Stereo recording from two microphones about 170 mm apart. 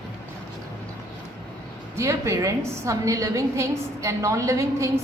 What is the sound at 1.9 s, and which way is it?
A woman's voice, 15° right (ahead or behind).